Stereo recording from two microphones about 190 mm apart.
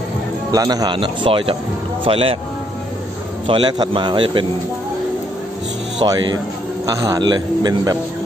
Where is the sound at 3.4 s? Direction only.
25° right (ahead or behind).